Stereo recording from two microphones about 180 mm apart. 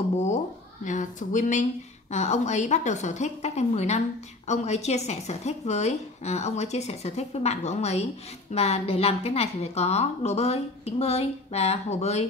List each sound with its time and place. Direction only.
0.8 s a woman's voice: 45° left (ahead or behind)